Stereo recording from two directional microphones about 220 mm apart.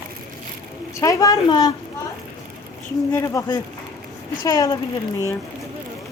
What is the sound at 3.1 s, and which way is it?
Speech, 15° left (ahead or behind).